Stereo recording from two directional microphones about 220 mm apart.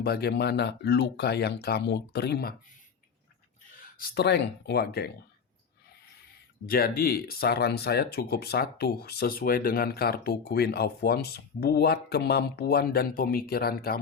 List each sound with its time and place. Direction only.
0.0 s speech: 45° left (ahead or behind)
3.9 s speech: 45° left (ahead or behind)
6.7 s speech: 40° left (ahead or behind)